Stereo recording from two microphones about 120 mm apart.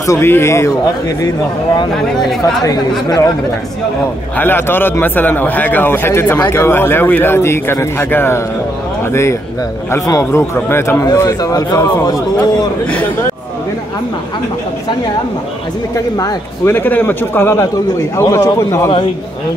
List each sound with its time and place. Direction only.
0.0 s speech: 25° left (ahead or behind)
1.8 s speech: 35° left (ahead or behind)
4.4 s a man's voice: 20° left (ahead or behind)
16.6 s a man's voice: 15° left (ahead or behind)